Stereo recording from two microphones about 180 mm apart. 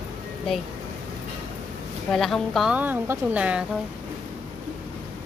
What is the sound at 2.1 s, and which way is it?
A woman's voice, centre (ahead or behind).